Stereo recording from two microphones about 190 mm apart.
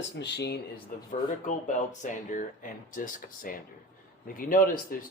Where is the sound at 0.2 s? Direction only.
60° left (ahead or behind).